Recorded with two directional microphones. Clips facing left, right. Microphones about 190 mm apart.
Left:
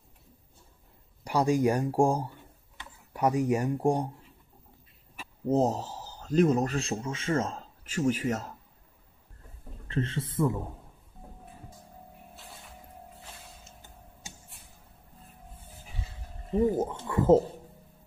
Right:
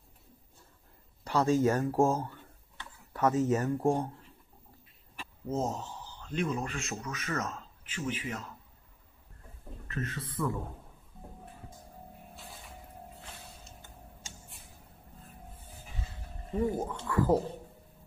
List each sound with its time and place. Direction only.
1.2 s speech: 15° left (ahead or behind)
5.5 s a man's voice: 35° left (ahead or behind)
7.8 s speech: 45° left (ahead or behind)
9.8 s a man's voice: 30° left (ahead or behind)
12.4 s vehicle: centre (ahead or behind)
16.5 s a man's voice: 20° left (ahead or behind)